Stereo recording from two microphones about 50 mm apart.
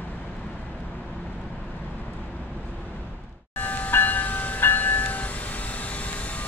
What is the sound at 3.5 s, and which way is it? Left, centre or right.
Train, left.